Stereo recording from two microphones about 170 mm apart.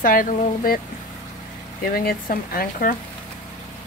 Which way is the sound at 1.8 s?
60° left (ahead or behind).